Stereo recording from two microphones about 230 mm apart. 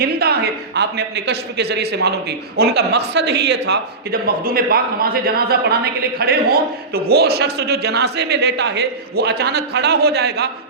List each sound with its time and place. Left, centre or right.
0.0 s a man's voice: right